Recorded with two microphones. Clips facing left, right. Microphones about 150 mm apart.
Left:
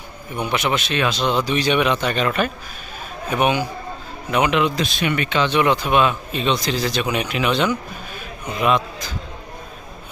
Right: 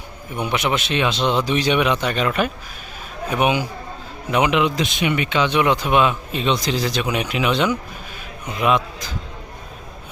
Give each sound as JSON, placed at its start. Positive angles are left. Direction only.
{"t": 0.3, "sound": "speech", "side_deg": -15}